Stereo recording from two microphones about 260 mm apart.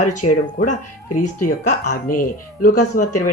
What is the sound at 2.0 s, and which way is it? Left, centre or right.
Speech, left.